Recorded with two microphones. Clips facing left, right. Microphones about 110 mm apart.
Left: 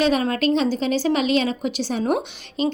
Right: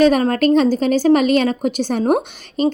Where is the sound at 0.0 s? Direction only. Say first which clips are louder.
Right 6 dB; 45° right (ahead or behind).